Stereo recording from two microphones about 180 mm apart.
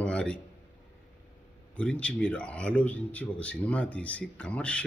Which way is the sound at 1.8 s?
5° left (ahead or behind).